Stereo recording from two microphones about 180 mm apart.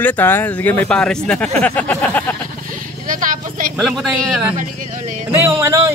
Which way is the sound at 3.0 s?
45° right (ahead or behind).